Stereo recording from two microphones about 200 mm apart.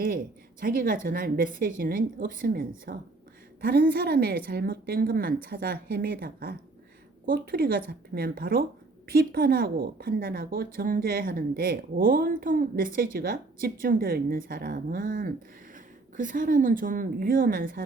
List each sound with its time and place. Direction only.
0.6 s a woman's voice: 45° right (ahead or behind)